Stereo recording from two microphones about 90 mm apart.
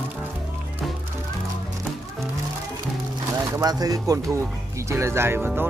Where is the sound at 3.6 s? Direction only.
45° right (ahead or behind).